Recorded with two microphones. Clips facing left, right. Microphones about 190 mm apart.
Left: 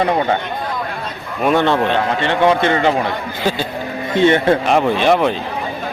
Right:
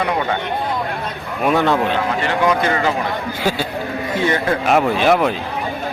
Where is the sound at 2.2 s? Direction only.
25° left (ahead or behind).